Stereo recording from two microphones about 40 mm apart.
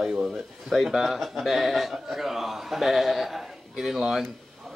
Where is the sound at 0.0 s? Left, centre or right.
Centre.